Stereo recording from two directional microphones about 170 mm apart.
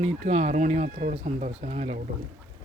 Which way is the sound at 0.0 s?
40° right (ahead or behind).